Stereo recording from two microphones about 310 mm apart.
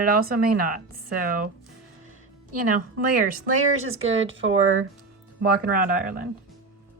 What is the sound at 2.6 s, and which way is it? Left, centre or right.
Speech, right.